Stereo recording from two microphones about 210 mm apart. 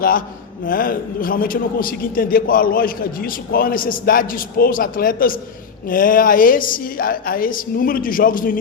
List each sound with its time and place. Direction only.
0.6 s a man's voice: 40° left (ahead or behind)